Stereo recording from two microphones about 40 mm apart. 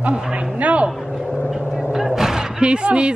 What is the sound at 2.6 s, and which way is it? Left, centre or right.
Speech, right.